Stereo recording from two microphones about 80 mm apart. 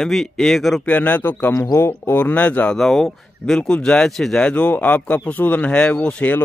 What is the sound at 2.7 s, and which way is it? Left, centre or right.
Speech, centre.